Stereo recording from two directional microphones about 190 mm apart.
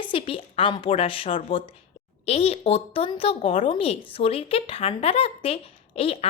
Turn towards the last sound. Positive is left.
turn(degrees=30)  # may be behind; listen again after turning